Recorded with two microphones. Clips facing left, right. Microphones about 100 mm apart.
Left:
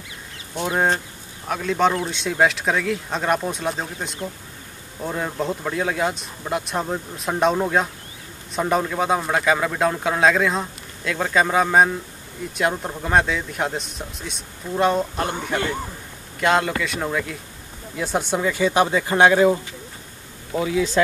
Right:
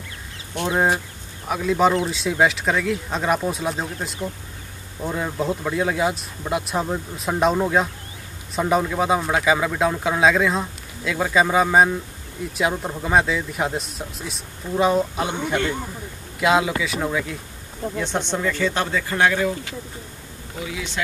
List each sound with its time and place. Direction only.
0.7 s speech: 10° right (ahead or behind); by 19.4 s 20° left (ahead or behind)
20.6 s speech: 35° left (ahead or behind)